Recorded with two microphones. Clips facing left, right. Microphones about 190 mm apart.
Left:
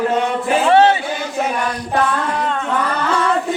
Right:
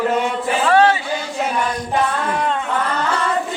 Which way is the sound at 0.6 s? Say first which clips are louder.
Left 2 dB; 25° left (ahead or behind).